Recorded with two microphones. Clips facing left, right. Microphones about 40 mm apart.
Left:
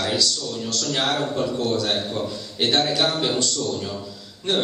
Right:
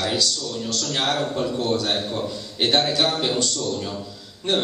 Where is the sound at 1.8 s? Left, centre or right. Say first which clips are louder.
Even; centre.